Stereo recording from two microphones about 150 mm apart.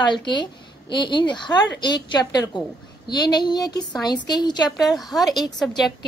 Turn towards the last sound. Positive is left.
turn(degrees=0)  # may be behind; listen again after turning